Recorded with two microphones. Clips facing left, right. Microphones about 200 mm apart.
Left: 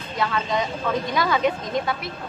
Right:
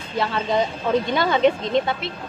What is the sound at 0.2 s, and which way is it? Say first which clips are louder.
A woman's voice: right 3 dB; 30° right (ahead or behind).